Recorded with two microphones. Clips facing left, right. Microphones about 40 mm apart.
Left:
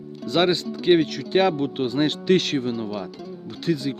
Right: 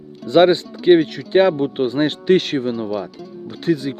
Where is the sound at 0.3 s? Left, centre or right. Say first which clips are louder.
Right 8 dB; right.